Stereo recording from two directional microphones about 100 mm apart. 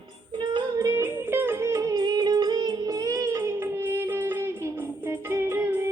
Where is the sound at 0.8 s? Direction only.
30° right (ahead or behind).